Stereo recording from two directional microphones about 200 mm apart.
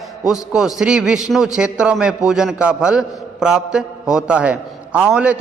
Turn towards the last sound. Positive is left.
turn(degrees=-5)  # may be behind; listen again after turning